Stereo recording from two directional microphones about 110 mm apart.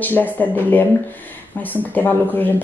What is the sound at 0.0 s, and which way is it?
Mantra, 15° left (ahead or behind).